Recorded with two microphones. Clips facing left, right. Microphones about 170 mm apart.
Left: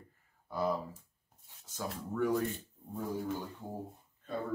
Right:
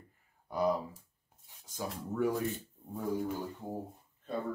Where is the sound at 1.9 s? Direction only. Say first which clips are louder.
Even; 5° right (ahead or behind).